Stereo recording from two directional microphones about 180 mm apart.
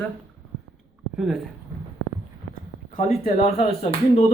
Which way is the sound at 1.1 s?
Centre (ahead or behind).